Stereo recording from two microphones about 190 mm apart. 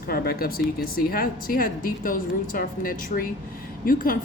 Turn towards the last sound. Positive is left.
turn(degrees=45)  # may be behind; listen again after turning